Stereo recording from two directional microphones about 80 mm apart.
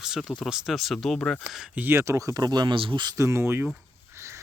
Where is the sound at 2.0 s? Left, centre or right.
Right.